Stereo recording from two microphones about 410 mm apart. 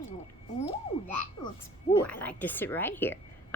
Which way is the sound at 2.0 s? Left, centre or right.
Centre.